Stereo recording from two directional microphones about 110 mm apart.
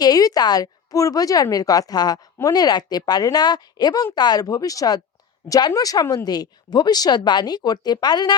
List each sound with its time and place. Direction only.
0.0 s speech: 35° left (ahead or behind)